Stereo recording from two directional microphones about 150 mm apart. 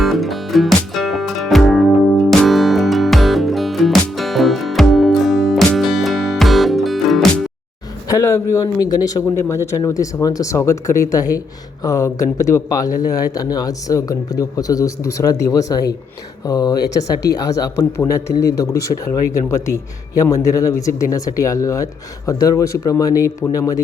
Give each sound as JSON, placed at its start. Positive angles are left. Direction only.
{"t": 0.0, "sound": "music", "side_deg": 0}
{"t": 8.0, "sound": "a man's voice", "side_deg": 20}